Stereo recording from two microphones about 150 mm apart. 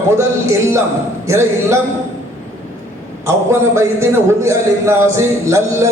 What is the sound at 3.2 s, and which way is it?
A man's voice, 20° right (ahead or behind).